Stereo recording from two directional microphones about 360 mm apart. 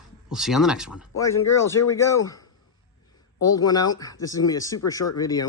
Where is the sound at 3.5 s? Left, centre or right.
Centre.